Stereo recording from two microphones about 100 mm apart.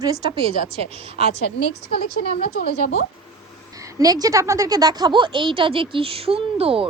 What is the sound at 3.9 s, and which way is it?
A woman's voice, 40° right (ahead or behind).